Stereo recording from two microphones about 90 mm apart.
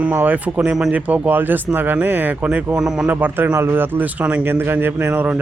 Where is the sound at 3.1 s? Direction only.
20° right (ahead or behind).